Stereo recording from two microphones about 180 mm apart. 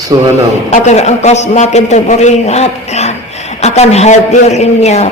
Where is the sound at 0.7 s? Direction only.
40° left (ahead or behind).